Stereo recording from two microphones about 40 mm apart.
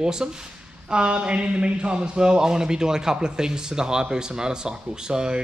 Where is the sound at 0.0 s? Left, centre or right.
Centre.